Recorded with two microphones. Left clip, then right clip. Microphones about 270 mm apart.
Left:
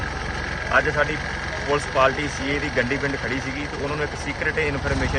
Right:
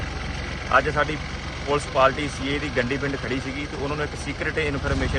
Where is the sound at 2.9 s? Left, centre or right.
Left.